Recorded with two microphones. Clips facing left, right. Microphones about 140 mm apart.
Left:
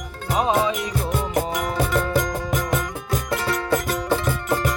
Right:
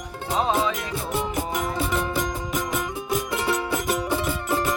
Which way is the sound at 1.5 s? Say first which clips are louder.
Left 3 dB; 20° right (ahead or behind).